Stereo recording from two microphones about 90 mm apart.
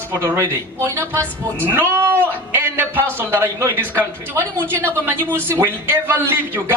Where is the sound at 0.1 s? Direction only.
25° right (ahead or behind).